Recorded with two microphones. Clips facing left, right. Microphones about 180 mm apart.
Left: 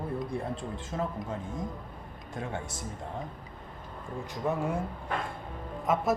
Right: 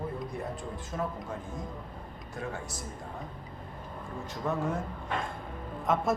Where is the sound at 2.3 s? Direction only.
25° left (ahead or behind).